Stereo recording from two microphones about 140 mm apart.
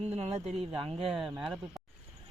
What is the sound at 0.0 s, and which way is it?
Speech, 45° right (ahead or behind).